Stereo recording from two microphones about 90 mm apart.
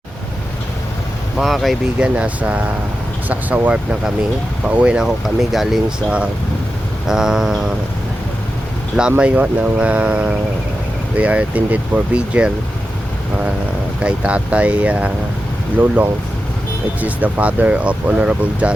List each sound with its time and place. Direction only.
1.4 s speech: centre (ahead or behind)
2.0 s speech: 15° right (ahead or behind)
9.0 s speech: 10° right (ahead or behind)
14.0 s speech: 10° right (ahead or behind)
17.0 s speech: 15° right (ahead or behind)